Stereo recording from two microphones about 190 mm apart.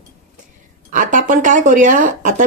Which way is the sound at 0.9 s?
45° right (ahead or behind).